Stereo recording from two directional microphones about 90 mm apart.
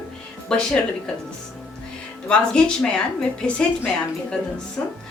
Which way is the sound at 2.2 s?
10° left (ahead or behind).